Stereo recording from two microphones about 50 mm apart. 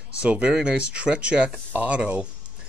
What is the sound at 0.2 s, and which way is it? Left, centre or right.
Speech, right.